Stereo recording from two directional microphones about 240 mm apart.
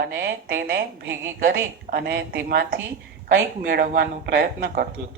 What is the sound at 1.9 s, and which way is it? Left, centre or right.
Speech, right.